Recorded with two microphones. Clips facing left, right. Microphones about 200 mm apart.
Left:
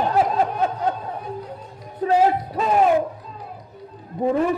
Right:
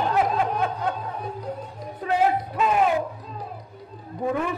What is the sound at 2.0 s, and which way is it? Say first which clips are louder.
Music: left 4 dB; 35° left (ahead or behind).